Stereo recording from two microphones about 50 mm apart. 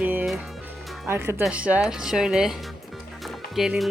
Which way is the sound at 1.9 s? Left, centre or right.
Centre.